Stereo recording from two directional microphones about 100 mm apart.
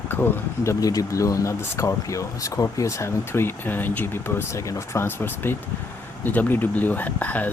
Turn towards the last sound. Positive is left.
turn(degrees=15)  # may be behind; listen again after turning